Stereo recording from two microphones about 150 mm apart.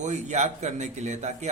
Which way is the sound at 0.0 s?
50° right (ahead or behind).